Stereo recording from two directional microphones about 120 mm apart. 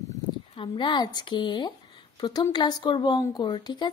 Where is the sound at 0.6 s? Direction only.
40° left (ahead or behind).